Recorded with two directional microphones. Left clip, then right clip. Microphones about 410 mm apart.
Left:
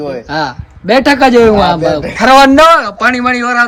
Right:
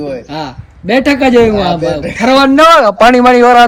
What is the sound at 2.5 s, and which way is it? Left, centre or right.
A man's voice, centre.